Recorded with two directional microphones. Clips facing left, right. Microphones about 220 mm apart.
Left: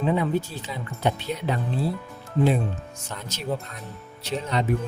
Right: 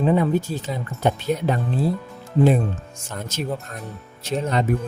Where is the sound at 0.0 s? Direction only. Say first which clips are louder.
Right 4 dB; 45° right (ahead or behind).